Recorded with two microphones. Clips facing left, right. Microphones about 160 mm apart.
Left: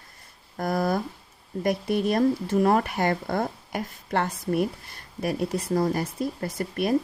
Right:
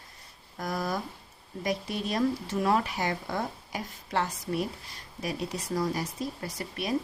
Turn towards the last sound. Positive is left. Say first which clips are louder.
# left 8 dB
turn(degrees=50)  # may be behind; listen again after turning